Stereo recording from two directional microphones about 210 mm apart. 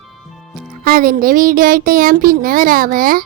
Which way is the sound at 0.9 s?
40° right (ahead or behind).